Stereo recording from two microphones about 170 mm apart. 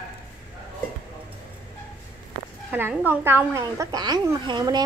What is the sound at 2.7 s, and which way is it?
Speech, 10° right (ahead or behind).